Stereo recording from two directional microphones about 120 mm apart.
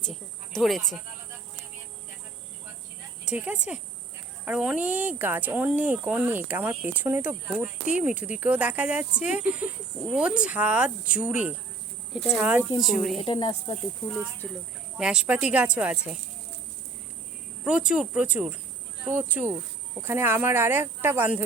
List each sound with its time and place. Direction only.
0.0 s snake: 5° left (ahead or behind)
3.2 s speech: 10° right (ahead or behind)
13.2 s speech: 45° left (ahead or behind)
14.4 s speech: 10° left (ahead or behind)
14.9 s speech: 5° right (ahead or behind)
17.6 s speech: 10° right (ahead or behind)